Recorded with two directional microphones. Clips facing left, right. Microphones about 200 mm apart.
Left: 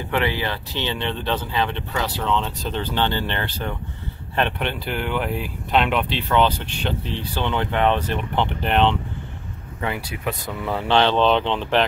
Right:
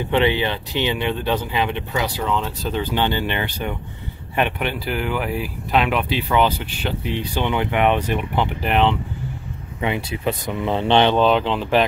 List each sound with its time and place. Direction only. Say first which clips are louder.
0.1 s speech: right 4 dB; 20° right (ahead or behind); by 8.9 s 5° right (ahead or behind)
9.8 s speech: right 4 dB; 20° right (ahead or behind); by 11.8 s 5° right (ahead or behind)